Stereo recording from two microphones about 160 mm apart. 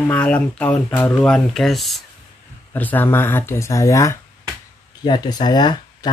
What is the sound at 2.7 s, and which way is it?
Speech, 10° left (ahead or behind).